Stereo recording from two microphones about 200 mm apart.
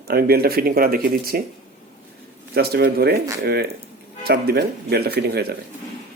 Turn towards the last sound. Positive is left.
turn(degrees=-50)  # may be behind; listen again after turning